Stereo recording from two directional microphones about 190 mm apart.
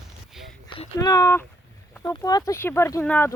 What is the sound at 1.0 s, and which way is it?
Speech, 20° left (ahead or behind).